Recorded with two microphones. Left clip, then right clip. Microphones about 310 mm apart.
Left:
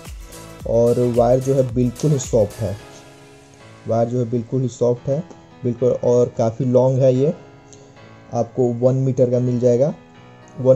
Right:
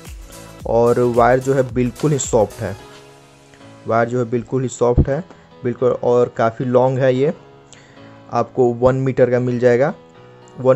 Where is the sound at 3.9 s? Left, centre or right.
Right.